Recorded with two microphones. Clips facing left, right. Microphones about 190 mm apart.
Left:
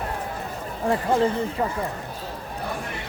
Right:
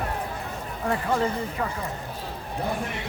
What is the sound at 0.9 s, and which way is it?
Speech, 30° left (ahead or behind).